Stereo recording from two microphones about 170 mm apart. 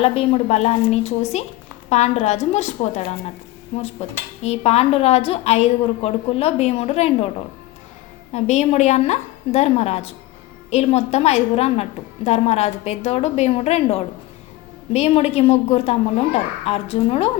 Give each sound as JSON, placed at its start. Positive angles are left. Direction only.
{"t": 0.0, "sound": "a woman's voice", "side_deg": 35}
{"t": 8.3, "sound": "a woman's voice", "side_deg": 40}